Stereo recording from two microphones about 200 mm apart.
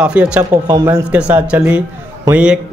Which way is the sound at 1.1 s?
5° right (ahead or behind).